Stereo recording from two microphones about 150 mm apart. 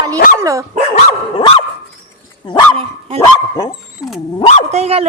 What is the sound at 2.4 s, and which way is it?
Speech, 30° left (ahead or behind).